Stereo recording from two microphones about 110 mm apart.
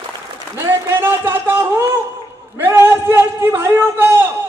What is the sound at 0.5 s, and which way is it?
A man's voice, 20° right (ahead or behind).